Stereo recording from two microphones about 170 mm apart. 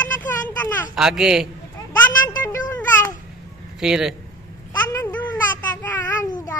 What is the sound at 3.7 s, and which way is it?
Speech, 5° right (ahead or behind).